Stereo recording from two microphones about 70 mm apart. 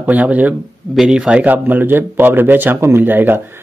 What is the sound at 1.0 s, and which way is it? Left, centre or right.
Speech, centre.